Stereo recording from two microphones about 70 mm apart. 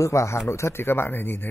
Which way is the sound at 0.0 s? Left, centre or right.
Left.